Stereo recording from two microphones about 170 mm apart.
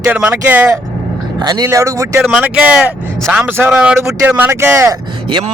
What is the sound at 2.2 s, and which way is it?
A man's voice, 5° right (ahead or behind).